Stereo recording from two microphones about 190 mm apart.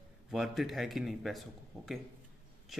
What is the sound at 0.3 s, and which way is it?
A man's voice, centre (ahead or behind).